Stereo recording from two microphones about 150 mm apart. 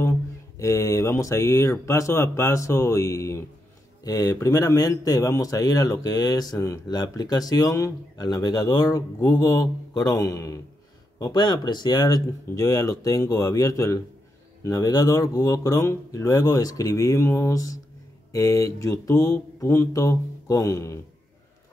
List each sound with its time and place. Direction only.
0.6 s speech: 20° left (ahead or behind)